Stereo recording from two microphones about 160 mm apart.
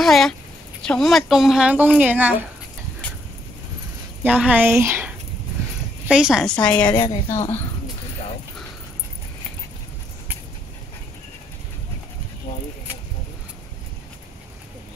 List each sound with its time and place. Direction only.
0.0 s a woman's voice: centre (ahead or behind)
4.2 s a woman's voice: 10° right (ahead or behind); by 6.9 s 5° left (ahead or behind)
6.9 s a woman's voice: 20° left (ahead or behind)